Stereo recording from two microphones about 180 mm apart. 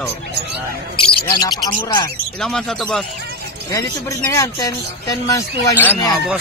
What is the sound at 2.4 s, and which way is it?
Speech, centre (ahead or behind).